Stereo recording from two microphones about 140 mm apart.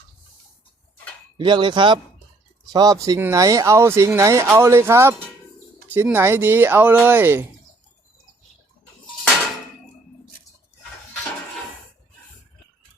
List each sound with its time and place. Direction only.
1.4 s speech: 35° right (ahead or behind); by 7.4 s 15° right (ahead or behind)